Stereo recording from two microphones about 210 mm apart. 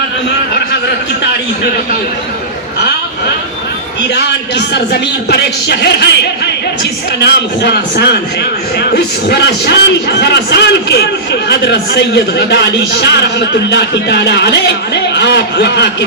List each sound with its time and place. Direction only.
4.1 s a man's voice: 55° left (ahead or behind)